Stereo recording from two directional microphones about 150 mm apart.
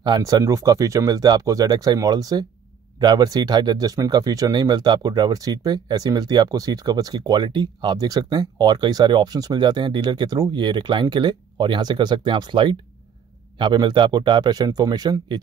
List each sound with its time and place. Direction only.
0.0 s speech: 25° right (ahead or behind)